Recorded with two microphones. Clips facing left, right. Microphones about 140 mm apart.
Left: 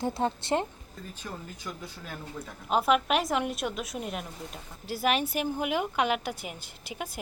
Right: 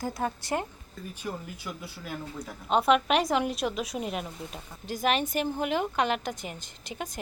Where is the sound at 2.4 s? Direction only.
5° left (ahead or behind).